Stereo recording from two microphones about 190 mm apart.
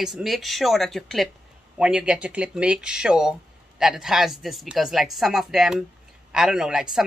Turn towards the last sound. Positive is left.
turn(degrees=-5)  # may be behind; listen again after turning